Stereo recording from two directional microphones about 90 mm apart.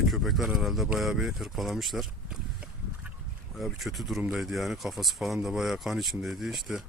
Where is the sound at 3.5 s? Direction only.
Centre (ahead or behind).